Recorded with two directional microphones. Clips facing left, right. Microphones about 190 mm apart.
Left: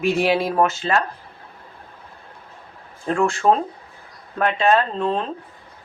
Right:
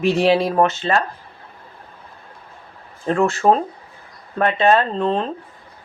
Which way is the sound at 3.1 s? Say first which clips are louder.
Right 2 dB; 5° right (ahead or behind).